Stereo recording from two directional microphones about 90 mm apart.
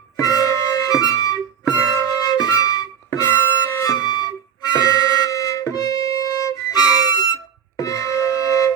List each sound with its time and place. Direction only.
0.2 s music: 40° left (ahead or behind)
3.9 s flute: 45° left (ahead or behind)
4.8 s music: 45° left (ahead or behind)